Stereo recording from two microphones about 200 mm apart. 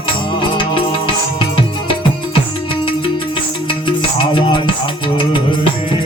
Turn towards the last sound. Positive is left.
turn(degrees=25)  # may be behind; listen again after turning